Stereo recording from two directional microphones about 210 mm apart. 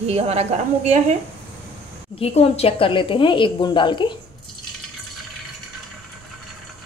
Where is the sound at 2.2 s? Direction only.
30° left (ahead or behind).